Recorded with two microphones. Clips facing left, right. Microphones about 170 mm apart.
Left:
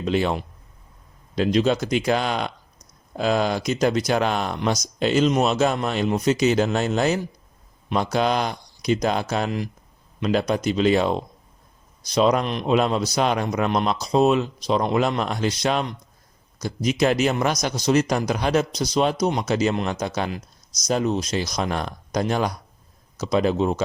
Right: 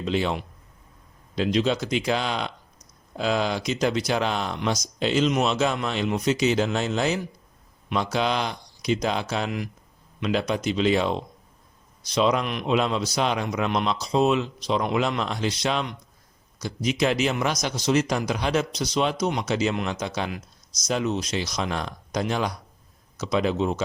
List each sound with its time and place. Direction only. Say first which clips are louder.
0.0 s speech: left 3 dB; 50° left (ahead or behind)
1.4 s speech: left 3 dB; 45° left (ahead or behind)